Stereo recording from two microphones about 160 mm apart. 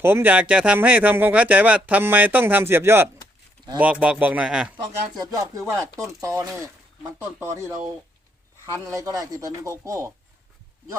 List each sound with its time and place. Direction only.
0.0 s speech: 15° right (ahead or behind)
5.1 s speech: 25° right (ahead or behind)